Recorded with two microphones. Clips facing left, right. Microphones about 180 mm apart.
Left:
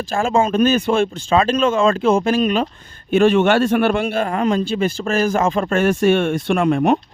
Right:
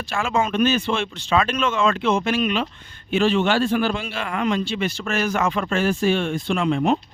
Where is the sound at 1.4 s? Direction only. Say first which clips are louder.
Left 5 dB; 35° left (ahead or behind); by 4.3 s 50° left (ahead or behind).